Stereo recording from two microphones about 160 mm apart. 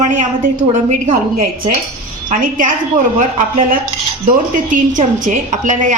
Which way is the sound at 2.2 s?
55° right (ahead or behind).